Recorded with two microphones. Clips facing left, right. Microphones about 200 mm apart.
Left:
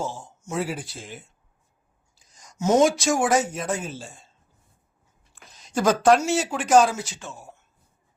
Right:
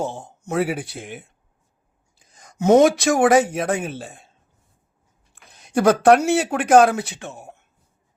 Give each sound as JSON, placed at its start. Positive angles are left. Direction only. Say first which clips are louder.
{"t": 0.0, "sound": "speech", "louder": "right 4 dB", "side_deg": -60}
{"t": 5.3, "sound": "speech", "louder": "right 6 dB", "side_deg": -60}